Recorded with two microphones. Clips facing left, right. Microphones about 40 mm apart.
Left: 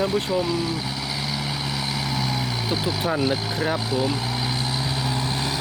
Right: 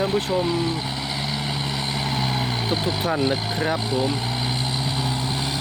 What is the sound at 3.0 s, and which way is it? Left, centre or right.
Speech, centre.